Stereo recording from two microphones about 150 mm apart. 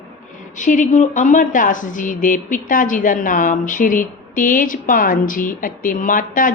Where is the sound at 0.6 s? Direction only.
55° left (ahead or behind).